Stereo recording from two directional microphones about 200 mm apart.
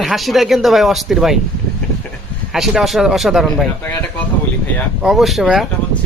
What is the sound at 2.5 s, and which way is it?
Speech, centre (ahead or behind).